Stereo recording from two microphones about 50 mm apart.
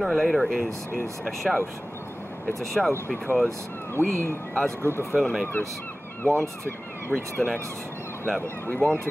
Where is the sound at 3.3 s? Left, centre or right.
Right.